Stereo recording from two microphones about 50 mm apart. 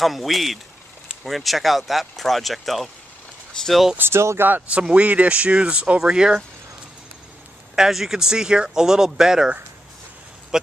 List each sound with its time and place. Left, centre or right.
0.0 s speech: centre
4.1 s speech: right
4.4 s speech: right
4.6 s speech: right
7.7 s speech: centre
10.5 s speech: centre